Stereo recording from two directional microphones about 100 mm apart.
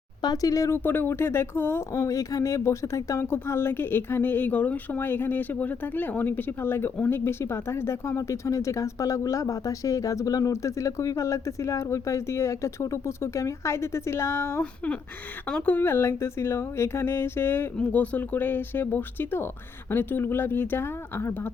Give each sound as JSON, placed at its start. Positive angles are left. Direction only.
{"t": 0.2, "sound": "speech", "side_deg": 40}
{"t": 0.9, "sound": "speech", "side_deg": 20}
{"t": 15.4, "sound": "speech", "side_deg": 15}